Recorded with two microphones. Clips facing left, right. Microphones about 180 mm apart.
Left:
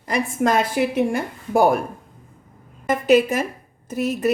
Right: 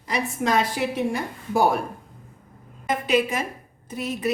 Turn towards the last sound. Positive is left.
turn(degrees=45)  # may be behind; listen again after turning